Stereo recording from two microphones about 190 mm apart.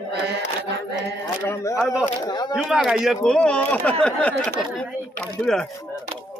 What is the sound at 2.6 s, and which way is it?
Speech, centre (ahead or behind).